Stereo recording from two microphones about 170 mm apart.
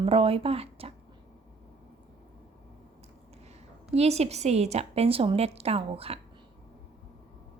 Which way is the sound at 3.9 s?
40° right (ahead or behind).